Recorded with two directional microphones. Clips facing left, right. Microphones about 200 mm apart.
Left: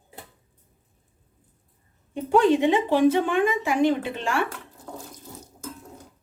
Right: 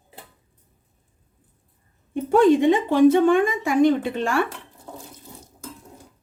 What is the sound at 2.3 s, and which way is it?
A woman's voice, 50° right (ahead or behind).